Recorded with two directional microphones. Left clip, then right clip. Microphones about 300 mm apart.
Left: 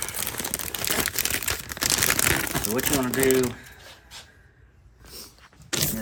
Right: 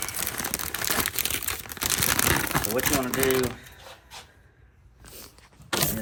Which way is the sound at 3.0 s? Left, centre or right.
Left.